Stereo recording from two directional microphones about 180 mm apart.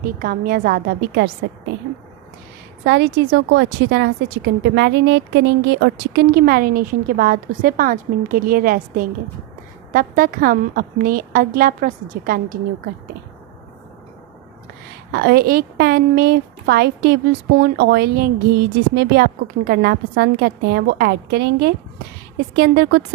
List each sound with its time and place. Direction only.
0.0 s a woman's voice: 55° right (ahead or behind); by 1.3 s 70° right (ahead or behind)
2.8 s a woman's voice: 75° right (ahead or behind); by 12.5 s 50° right (ahead or behind)
15.1 s a woman's voice: 65° right (ahead or behind)